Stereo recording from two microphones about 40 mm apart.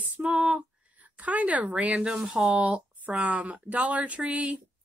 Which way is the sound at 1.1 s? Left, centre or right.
Right.